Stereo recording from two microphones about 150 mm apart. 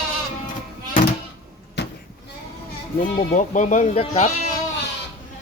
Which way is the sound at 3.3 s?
55° left (ahead or behind).